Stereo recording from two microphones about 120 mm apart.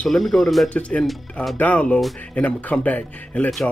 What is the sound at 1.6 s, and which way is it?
A man's voice, 10° left (ahead or behind).